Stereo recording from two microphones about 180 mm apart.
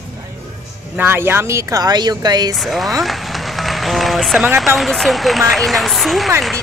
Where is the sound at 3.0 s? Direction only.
Centre (ahead or behind).